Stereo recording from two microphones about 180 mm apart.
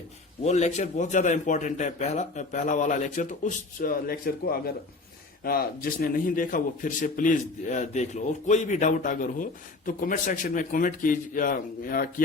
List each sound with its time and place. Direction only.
0.4 s speech: 40° left (ahead or behind)